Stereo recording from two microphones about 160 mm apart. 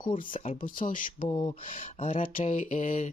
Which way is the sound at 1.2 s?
40° left (ahead or behind).